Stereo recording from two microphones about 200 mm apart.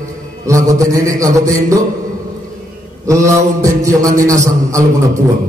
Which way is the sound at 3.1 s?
15° right (ahead or behind).